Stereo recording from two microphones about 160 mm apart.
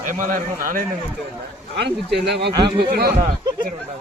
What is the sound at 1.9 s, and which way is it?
Speech, 90° right.